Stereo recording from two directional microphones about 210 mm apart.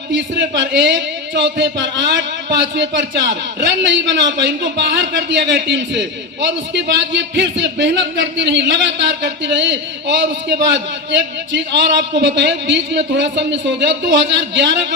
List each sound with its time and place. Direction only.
0.1 s a man's voice: 60° right (ahead or behind)